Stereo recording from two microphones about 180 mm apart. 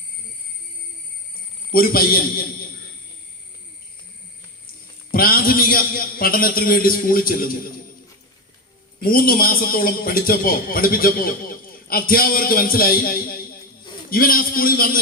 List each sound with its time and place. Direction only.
1.7 s a man's voice: 55° left (ahead or behind)
5.1 s a man's voice: 55° left (ahead or behind)
9.0 s a man's voice: 55° left (ahead or behind)